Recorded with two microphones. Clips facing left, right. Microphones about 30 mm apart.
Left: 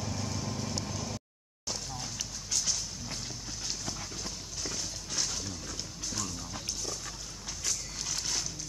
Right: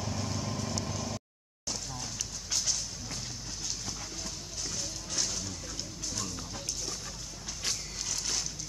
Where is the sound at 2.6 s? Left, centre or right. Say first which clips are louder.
Even; centre.